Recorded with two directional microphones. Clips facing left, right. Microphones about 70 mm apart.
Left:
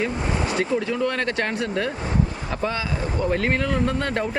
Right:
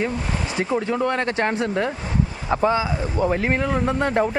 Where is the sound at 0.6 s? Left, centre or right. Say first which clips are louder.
Right 4 dB; right.